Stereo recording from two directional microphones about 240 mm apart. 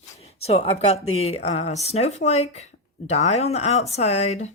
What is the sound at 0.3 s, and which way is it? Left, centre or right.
Speech, left.